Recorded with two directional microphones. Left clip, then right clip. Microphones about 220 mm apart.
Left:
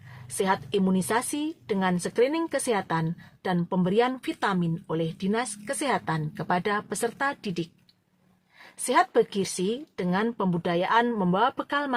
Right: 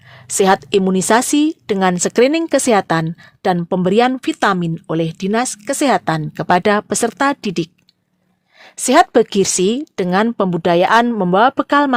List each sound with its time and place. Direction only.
0.3 s a woman's voice: 45° right (ahead or behind)